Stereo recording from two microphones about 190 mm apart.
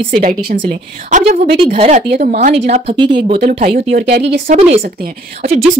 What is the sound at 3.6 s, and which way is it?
Speech, 50° right (ahead or behind).